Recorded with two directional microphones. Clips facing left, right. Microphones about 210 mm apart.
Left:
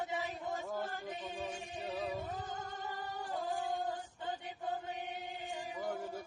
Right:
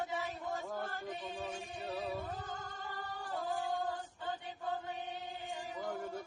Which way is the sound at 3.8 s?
20° left (ahead or behind).